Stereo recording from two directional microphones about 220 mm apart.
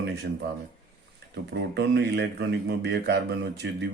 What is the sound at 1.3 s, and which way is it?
Speech, 50° right (ahead or behind).